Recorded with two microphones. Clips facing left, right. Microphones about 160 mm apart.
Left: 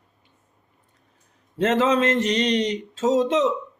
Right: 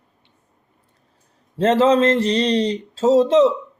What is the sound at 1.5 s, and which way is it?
Speech, 30° right (ahead or behind).